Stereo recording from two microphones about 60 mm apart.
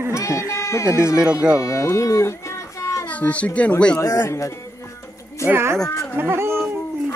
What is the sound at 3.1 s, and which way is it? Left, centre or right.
Speech, left.